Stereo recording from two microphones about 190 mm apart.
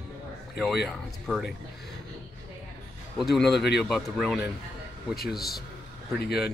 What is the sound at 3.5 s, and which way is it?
Speech, 60° left (ahead or behind).